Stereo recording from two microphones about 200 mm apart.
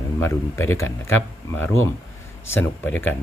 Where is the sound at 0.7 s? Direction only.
90° left.